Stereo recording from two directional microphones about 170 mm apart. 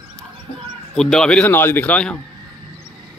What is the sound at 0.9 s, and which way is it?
A man's voice, 5° left (ahead or behind).